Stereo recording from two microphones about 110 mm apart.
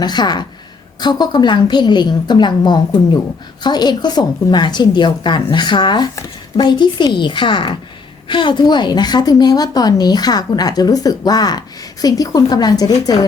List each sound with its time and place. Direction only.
0.0 s a woman's voice: 40° left (ahead or behind)